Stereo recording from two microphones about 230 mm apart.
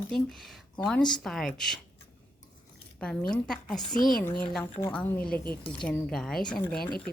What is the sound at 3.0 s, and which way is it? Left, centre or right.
Speech, centre.